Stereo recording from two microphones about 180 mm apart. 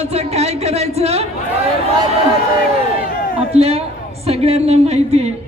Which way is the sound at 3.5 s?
35° right (ahead or behind).